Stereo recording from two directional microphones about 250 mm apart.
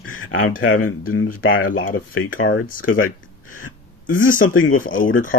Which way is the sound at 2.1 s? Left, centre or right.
Left.